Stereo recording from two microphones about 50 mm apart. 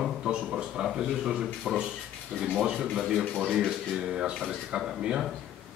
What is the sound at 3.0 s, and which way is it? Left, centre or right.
Speech, centre.